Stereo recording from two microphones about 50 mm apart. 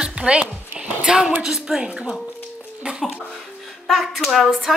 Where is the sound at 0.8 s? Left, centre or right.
Right.